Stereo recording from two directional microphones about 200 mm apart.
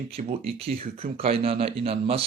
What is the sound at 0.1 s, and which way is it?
Speech, 30° right (ahead or behind).